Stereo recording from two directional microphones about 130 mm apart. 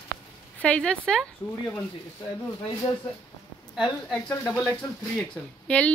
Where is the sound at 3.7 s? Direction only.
Centre (ahead or behind).